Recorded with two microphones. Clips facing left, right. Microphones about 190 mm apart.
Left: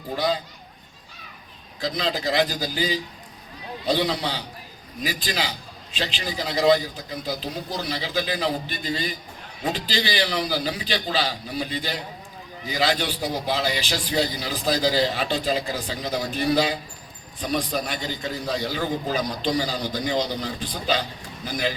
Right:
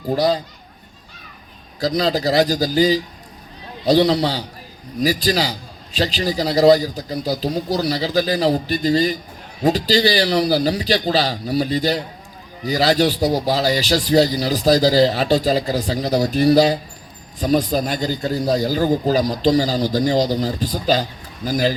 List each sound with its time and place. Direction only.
0.1 s a man's voice: 40° right (ahead or behind)
1.8 s a man's voice: 40° right (ahead or behind)